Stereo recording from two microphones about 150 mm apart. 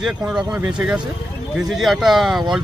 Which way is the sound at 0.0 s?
5° right (ahead or behind).